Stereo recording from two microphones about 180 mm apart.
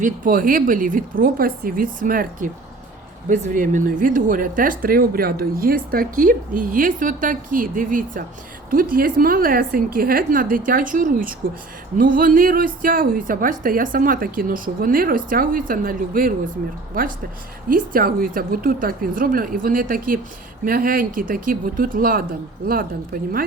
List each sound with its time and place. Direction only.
0.0 s speech: 50° right (ahead or behind)
17.7 s speech: 50° right (ahead or behind)